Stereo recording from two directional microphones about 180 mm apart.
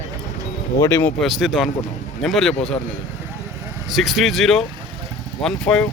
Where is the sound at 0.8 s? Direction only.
15° left (ahead or behind).